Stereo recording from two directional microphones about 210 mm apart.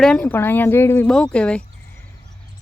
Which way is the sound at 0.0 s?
5° left (ahead or behind).